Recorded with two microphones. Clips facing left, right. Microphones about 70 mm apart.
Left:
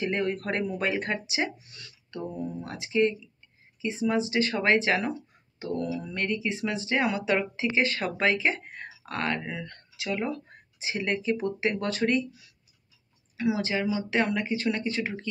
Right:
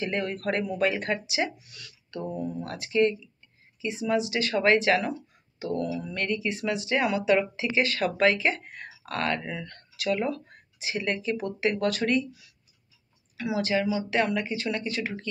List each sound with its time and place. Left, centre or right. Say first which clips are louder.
0.0 s speech: left 1 dB; left